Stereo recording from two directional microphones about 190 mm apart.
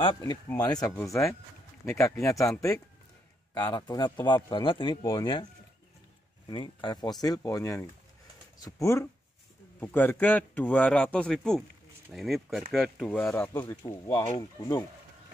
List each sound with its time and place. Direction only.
0.0 s speech: 25° left (ahead or behind)
1.8 s speech: centre (ahead or behind)
2.2 s speech: 15° left (ahead or behind)
6.5 s speech: 25° left (ahead or behind)